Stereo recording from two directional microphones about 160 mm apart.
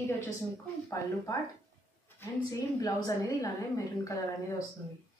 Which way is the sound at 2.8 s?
20° left (ahead or behind).